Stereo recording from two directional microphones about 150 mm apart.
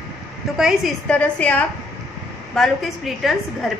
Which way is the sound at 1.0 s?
10° left (ahead or behind).